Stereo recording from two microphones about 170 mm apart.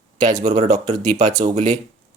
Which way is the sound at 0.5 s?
45° right (ahead or behind).